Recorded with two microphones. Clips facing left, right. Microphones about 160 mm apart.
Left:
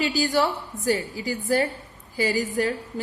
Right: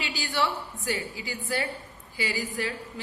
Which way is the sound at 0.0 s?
40° left (ahead or behind).